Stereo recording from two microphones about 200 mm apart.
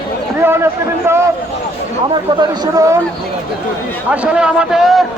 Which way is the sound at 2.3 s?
20° right (ahead or behind).